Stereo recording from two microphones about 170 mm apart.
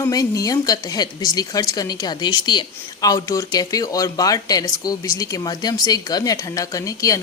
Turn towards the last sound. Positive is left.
turn(degrees=20)  # may be behind; listen again after turning